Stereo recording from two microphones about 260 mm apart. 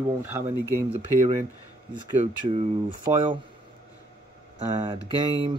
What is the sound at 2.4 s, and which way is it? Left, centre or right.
Speech, centre.